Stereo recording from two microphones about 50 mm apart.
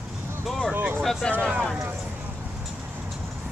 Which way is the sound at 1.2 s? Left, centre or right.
Centre.